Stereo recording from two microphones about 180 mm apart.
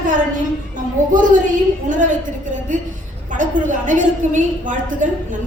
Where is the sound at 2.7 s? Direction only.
45° right (ahead or behind).